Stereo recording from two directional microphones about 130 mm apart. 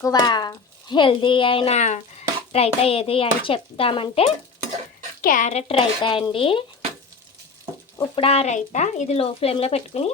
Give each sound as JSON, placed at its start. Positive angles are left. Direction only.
{"t": 0.0, "sound": "a woman's voice", "side_deg": 30}
{"t": 5.2, "sound": "a woman's voice", "side_deg": 85}
{"t": 8.1, "sound": "a woman's voice", "side_deg": 50}
{"t": 8.5, "sound": "a woman's voice", "side_deg": 65}